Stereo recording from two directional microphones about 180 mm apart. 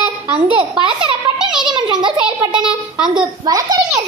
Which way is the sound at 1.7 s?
25° right (ahead or behind).